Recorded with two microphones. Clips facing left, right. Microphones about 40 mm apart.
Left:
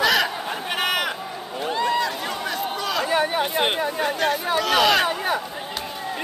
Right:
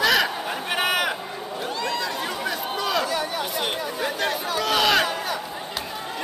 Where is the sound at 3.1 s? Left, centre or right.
Left.